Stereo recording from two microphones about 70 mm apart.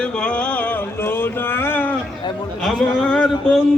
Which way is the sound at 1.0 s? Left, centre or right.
Left.